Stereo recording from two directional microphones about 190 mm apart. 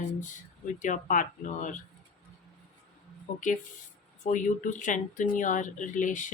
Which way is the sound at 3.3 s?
40° left (ahead or behind).